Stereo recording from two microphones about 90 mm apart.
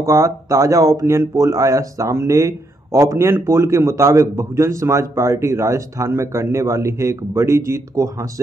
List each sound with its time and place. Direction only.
0.0 s speech: 35° right (ahead or behind)